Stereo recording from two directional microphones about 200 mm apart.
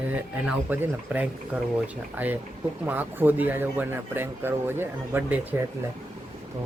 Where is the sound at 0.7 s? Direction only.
10° right (ahead or behind).